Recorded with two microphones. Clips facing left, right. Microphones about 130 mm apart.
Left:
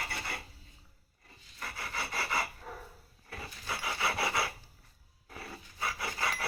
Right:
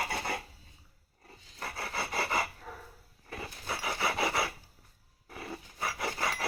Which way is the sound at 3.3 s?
15° right (ahead or behind).